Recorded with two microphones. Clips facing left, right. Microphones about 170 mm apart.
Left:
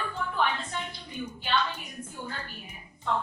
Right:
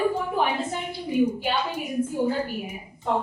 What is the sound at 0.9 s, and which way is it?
A woman's voice, 10° right (ahead or behind).